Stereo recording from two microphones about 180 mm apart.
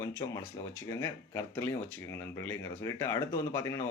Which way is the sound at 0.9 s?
15° left (ahead or behind).